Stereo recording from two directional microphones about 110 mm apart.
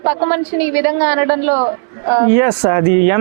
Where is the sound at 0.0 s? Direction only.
20° right (ahead or behind).